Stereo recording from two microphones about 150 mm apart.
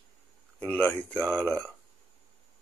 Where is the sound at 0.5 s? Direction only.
10° left (ahead or behind).